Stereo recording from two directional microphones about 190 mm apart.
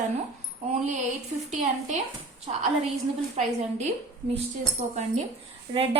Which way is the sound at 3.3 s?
35° right (ahead or behind).